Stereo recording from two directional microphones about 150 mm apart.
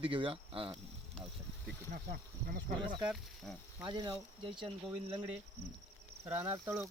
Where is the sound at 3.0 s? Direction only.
5° right (ahead or behind).